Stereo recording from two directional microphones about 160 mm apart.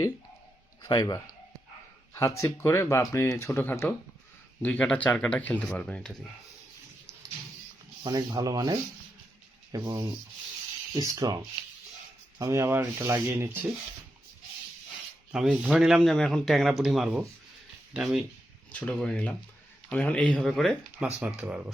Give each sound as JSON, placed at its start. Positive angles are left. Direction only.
{"t": 0.8, "sound": "a man's voice", "side_deg": 25}
{"t": 8.0, "sound": "rub", "side_deg": -25}
{"t": 12.4, "sound": "speech", "side_deg": -15}
{"t": 15.3, "sound": "a man's voice", "side_deg": -5}
{"t": 18.7, "sound": "speech", "side_deg": 10}
{"t": 21.0, "sound": "a man's voice", "side_deg": -5}